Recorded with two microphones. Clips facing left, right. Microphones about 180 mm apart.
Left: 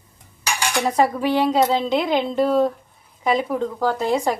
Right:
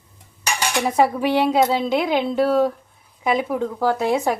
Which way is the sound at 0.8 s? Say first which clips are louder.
Right 1 dB; 5° right (ahead or behind).